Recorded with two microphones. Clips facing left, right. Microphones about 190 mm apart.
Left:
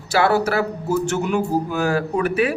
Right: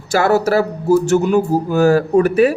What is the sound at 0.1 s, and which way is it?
Speech, 45° right (ahead or behind).